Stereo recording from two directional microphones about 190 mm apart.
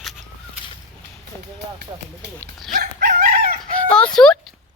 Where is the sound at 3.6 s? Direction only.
5° left (ahead or behind).